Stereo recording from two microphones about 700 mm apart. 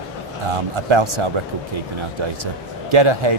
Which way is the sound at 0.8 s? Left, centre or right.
Right.